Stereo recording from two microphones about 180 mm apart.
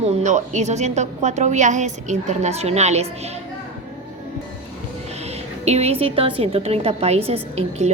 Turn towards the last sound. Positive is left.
turn(degrees=-35)  # may be behind; listen again after turning